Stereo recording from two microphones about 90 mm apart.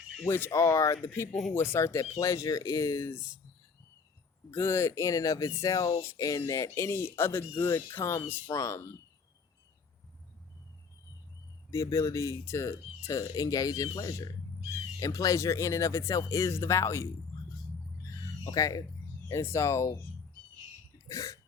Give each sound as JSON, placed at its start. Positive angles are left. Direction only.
{"t": 0.3, "sound": "speech", "side_deg": 25}
{"t": 4.5, "sound": "speech", "side_deg": 30}
{"t": 11.7, "sound": "speech", "side_deg": 35}
{"t": 18.4, "sound": "speech", "side_deg": 40}
{"t": 21.1, "sound": "speech", "side_deg": 40}